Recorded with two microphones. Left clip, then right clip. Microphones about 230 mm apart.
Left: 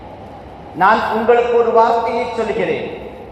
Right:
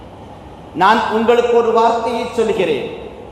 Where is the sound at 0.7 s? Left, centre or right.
Right.